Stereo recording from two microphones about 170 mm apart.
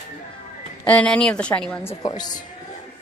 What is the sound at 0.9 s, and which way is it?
A woman's voice, 5° left (ahead or behind).